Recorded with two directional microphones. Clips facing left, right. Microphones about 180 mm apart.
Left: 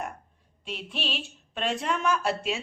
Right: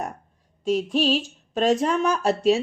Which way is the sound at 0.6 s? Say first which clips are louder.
Right 14 dB; 40° right (ahead or behind).